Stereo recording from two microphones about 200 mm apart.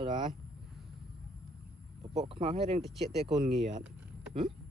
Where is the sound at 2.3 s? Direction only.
30° right (ahead or behind).